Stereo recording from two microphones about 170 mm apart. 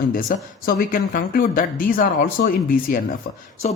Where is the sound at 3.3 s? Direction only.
70° left (ahead or behind).